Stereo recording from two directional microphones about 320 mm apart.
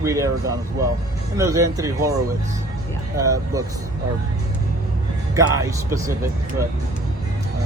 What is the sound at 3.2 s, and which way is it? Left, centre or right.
Speech, centre.